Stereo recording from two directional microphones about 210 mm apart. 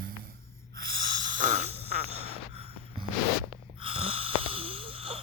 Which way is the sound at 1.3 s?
35° right (ahead or behind).